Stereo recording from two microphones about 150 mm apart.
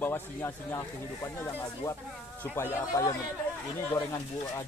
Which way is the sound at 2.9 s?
20° left (ahead or behind).